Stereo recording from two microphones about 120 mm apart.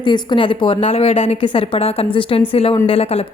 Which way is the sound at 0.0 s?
40° left (ahead or behind).